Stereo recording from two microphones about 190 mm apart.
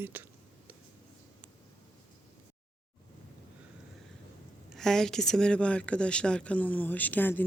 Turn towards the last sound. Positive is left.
turn(degrees=10)  # may be behind; listen again after turning